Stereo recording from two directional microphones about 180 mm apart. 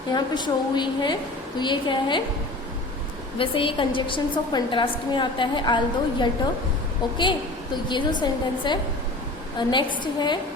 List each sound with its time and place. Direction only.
0.1 s a woman's voice: 25° left (ahead or behind)
3.3 s a woman's voice: 30° left (ahead or behind)